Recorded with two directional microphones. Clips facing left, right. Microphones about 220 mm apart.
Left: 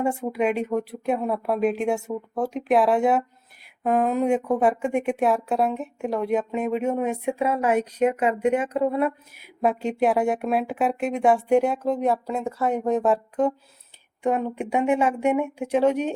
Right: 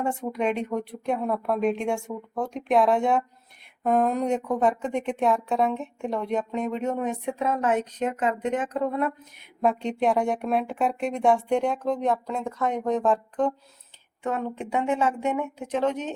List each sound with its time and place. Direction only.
0.0 s a woman's voice: 10° left (ahead or behind)